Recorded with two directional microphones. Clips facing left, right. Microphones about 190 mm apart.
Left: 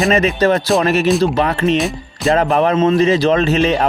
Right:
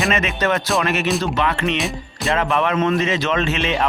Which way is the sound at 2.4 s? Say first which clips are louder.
Left 5 dB; 35° left (ahead or behind).